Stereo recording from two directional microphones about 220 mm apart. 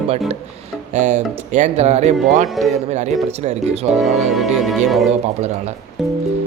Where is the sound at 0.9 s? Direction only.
30° right (ahead or behind).